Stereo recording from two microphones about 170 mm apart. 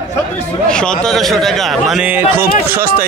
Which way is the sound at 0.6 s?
5° left (ahead or behind).